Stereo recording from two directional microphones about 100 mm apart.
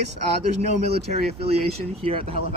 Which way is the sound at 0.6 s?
90° right.